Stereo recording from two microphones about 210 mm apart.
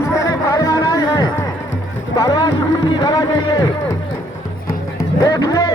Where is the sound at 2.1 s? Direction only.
20° left (ahead or behind).